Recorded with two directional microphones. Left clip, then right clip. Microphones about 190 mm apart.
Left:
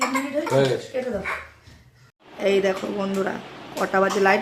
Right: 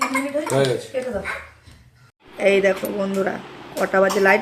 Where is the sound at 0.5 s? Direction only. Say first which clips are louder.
Even; 15° right (ahead or behind).